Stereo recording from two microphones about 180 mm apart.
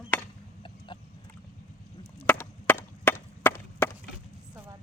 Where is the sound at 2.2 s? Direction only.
10° left (ahead or behind).